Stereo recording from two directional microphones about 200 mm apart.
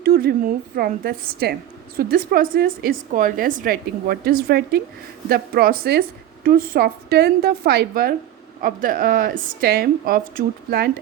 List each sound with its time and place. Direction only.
0.0 s a woman's voice: 50° right (ahead or behind)